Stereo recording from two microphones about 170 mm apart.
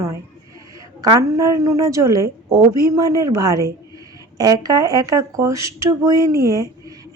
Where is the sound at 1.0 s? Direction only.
20° right (ahead or behind).